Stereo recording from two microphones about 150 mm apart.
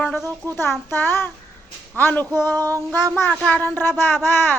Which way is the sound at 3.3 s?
5° left (ahead or behind).